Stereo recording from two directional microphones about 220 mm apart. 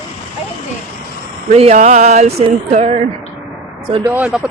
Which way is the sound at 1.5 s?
30° right (ahead or behind).